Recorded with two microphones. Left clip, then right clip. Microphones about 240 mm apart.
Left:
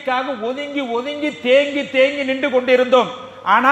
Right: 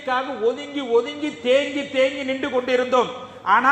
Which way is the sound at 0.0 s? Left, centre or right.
Left.